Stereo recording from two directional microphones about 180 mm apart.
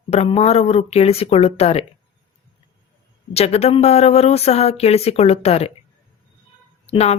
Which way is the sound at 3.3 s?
35° left (ahead or behind).